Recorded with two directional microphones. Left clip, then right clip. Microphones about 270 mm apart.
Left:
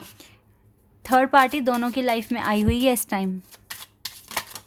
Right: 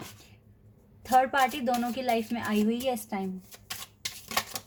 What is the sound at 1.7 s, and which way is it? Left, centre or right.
Speech, left.